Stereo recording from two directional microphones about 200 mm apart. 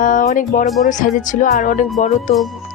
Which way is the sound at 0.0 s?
40° left (ahead or behind).